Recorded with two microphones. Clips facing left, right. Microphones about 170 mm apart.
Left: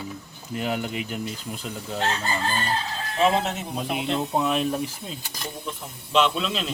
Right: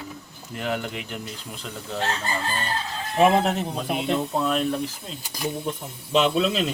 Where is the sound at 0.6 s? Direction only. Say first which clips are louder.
Left 1 dB; 5° left (ahead or behind).